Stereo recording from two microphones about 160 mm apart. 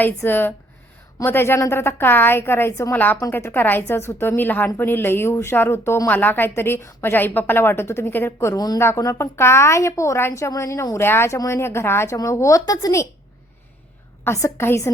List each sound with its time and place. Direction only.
0.0 s a woman's voice: 15° left (ahead or behind)
14.3 s a woman's voice: 15° left (ahead or behind)